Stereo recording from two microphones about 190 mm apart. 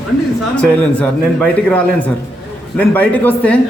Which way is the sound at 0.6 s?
5° left (ahead or behind).